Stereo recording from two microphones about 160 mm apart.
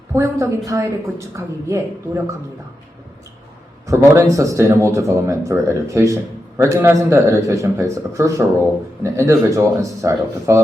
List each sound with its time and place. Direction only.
0.1 s speech: 20° right (ahead or behind)
3.8 s speech: 15° right (ahead or behind)